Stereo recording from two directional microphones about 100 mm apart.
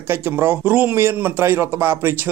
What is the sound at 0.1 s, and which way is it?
A man's voice, 25° right (ahead or behind).